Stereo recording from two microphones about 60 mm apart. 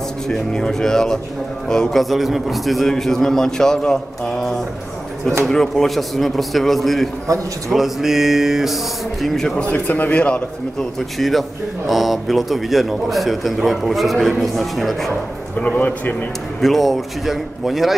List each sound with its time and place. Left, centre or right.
0.3 s a man's voice: centre
9.6 s a man's voice: left
10.8 s speech: centre
15.6 s a man's voice: left
16.6 s speech: centre